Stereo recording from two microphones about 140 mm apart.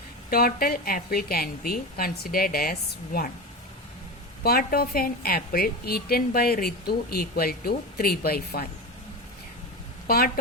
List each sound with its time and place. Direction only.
0.3 s a woman's voice: 90° left
4.4 s a woman's voice: 90° left
10.1 s a woman's voice: 90° left